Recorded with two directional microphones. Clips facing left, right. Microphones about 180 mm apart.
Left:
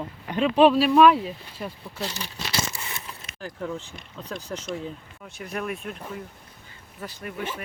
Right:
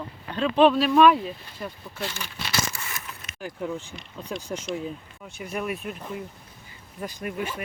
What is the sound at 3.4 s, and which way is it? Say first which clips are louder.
Speech: right 1 dB; 5° right (ahead or behind).